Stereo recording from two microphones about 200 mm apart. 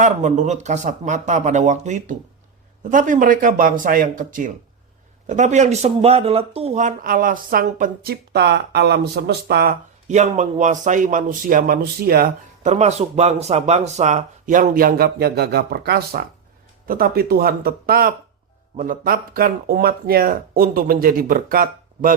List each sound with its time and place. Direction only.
0.0 s speech: 35° right (ahead or behind); by 9.7 s 55° right (ahead or behind)
10.1 s speech: 35° right (ahead or behind)
12.7 s speech: 35° right (ahead or behind)